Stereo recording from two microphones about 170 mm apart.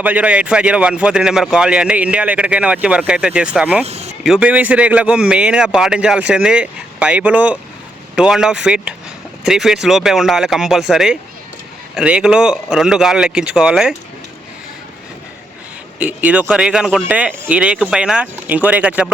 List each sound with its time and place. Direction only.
0.0 s a man's voice: 10° right (ahead or behind)
3.8 s speech: 40° right (ahead or behind)
4.2 s a man's voice: 5° right (ahead or behind)
16.0 s a man's voice: 10° right (ahead or behind)